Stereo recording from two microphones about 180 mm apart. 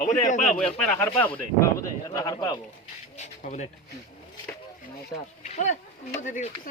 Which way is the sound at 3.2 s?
40° left (ahead or behind).